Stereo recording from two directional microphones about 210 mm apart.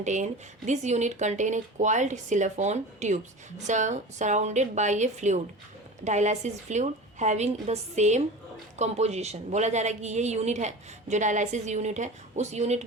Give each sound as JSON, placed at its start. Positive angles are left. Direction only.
{"t": 0.0, "sound": "a woman's voice", "side_deg": -35}